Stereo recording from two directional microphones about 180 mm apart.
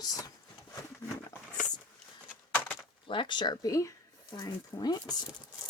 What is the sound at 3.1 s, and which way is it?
Speech, 25° left (ahead or behind).